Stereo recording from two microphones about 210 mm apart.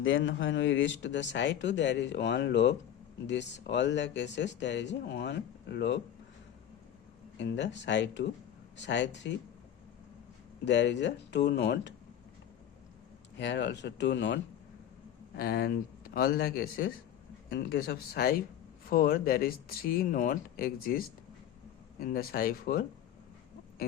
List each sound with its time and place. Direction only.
0.0 s speech: 65° left (ahead or behind)
7.3 s speech: 55° left (ahead or behind)
10.7 s speech: 55° left (ahead or behind)
13.3 s speech: 60° left (ahead or behind)
15.4 s speech: 45° left (ahead or behind)
22.0 s speech: 45° left (ahead or behind)